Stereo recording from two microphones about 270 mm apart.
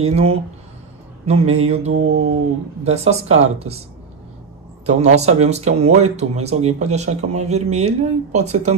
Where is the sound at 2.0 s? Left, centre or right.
Right.